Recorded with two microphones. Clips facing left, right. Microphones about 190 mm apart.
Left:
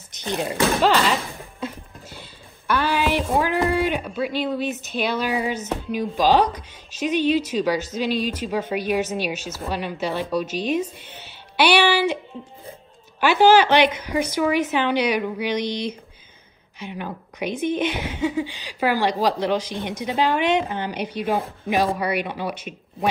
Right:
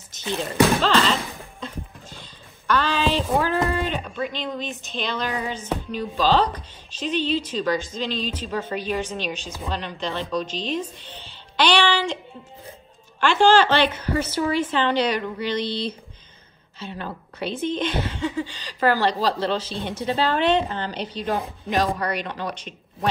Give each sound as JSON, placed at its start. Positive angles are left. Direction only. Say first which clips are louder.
{"t": 0.1, "sound": "speech", "louder": "left 2 dB", "side_deg": 15}
{"t": 13.2, "sound": "speech", "louder": "left 2 dB", "side_deg": 10}